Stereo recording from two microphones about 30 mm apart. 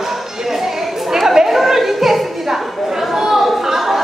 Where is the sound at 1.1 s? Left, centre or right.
Centre.